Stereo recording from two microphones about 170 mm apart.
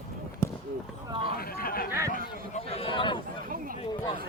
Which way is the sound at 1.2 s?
60° left (ahead or behind).